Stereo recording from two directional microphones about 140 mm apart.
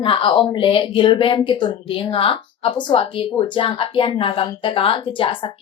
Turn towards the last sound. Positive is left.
turn(degrees=35)  # may be behind; listen again after turning